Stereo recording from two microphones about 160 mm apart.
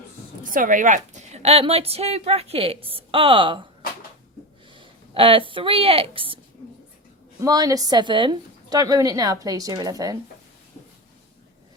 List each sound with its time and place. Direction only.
0.5 s a woman's voice: 55° right (ahead or behind); by 3.7 s 30° right (ahead or behind)
4.7 s speech: 35° right (ahead or behind)
7.4 s a woman's voice: 20° right (ahead or behind)